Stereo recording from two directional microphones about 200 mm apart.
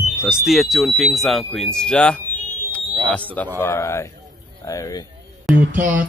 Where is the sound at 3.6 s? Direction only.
15° left (ahead or behind).